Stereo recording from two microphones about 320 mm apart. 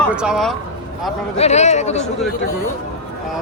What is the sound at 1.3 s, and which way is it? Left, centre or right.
Speech, centre.